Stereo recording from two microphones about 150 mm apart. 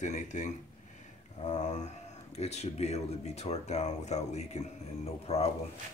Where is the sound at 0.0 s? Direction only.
55° left (ahead or behind).